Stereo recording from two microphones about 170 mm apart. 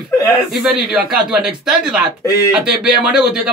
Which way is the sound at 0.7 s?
5° right (ahead or behind).